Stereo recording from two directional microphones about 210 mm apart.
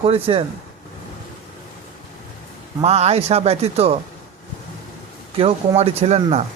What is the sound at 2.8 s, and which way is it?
A man's voice, 30° right (ahead or behind).